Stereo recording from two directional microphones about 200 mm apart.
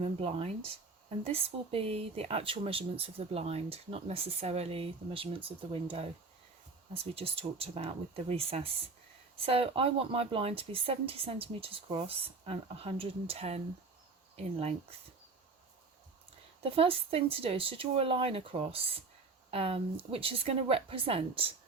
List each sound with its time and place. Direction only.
0.0 s speech: 30° right (ahead or behind)
16.6 s speech: 30° right (ahead or behind)